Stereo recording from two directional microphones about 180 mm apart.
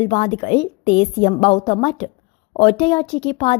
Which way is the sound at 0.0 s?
35° left (ahead or behind).